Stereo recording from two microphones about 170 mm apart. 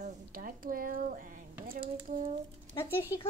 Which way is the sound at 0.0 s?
55° right (ahead or behind).